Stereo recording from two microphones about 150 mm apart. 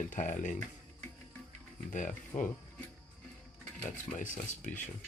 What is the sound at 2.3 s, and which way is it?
Speech, 40° left (ahead or behind).